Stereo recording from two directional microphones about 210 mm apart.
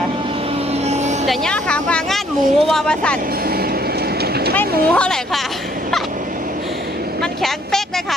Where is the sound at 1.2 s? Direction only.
Centre (ahead or behind).